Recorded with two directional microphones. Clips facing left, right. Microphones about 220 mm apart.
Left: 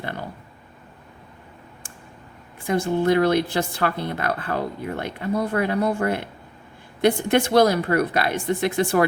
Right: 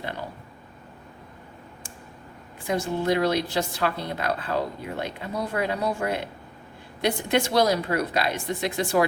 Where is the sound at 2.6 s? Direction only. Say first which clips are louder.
Left 4 dB; 55° left (ahead or behind).